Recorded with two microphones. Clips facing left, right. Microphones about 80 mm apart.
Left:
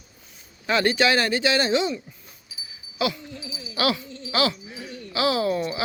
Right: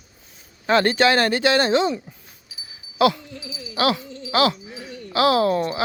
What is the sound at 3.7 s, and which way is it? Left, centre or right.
Speech, right.